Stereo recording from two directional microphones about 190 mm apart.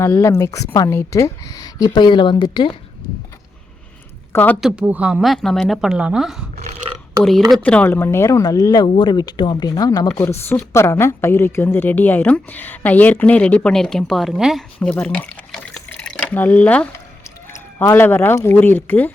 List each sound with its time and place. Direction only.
0.0 s a woman's voice: 15° left (ahead or behind)
4.3 s speech: 10° left (ahead or behind)
4.6 s a woman's voice: 5° right (ahead or behind); by 19.1 s 10° left (ahead or behind)